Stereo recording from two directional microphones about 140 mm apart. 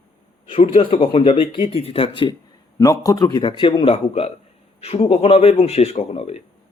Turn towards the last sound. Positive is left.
turn(degrees=45)  # may be behind; listen again after turning